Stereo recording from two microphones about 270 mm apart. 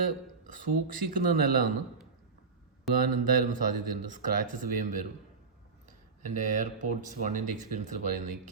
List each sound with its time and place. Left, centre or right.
0.4 s speech: right
2.9 s speech: right
6.2 s speech: right